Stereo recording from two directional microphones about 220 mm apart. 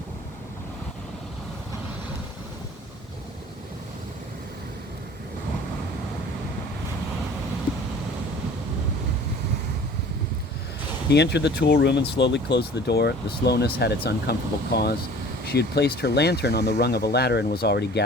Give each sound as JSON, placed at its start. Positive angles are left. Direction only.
{"t": 11.1, "sound": "speech", "side_deg": 50}